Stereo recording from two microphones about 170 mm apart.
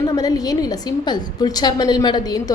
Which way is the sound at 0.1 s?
20° left (ahead or behind).